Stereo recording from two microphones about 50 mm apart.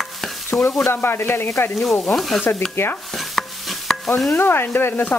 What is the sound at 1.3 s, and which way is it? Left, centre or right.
Speech, left.